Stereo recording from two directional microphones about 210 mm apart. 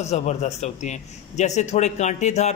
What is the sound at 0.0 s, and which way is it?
A man's voice, 30° left (ahead or behind).